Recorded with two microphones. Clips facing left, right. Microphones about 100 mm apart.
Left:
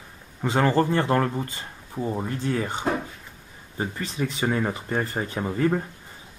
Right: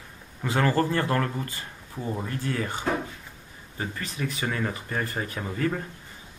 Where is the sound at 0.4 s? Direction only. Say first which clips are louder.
Left 3 dB; 20° left (ahead or behind).